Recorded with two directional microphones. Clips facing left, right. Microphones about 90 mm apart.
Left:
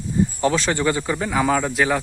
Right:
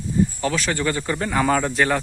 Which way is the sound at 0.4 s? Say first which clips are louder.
Left 3 dB; 25° left (ahead or behind).